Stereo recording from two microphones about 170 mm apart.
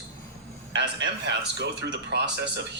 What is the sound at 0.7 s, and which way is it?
Speech, 90° right.